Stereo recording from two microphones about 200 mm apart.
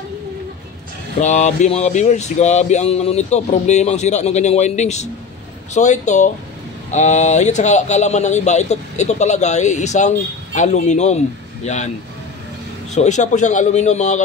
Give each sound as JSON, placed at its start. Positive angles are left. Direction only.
{"t": 1.2, "sound": "speech", "side_deg": 35}
{"t": 12.9, "sound": "speech", "side_deg": 35}